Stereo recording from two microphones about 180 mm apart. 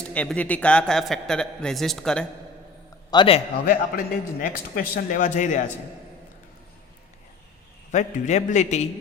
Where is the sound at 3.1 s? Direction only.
25° left (ahead or behind).